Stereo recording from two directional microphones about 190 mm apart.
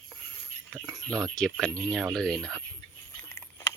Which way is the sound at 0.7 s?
5° right (ahead or behind).